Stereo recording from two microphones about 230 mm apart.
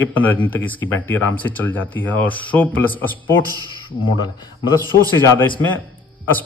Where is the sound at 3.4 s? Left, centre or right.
Centre.